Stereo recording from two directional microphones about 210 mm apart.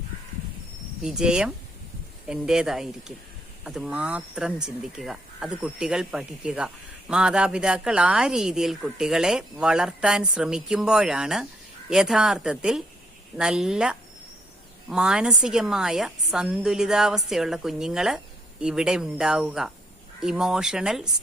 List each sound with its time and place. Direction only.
1.0 s a woman's voice: 5° right (ahead or behind)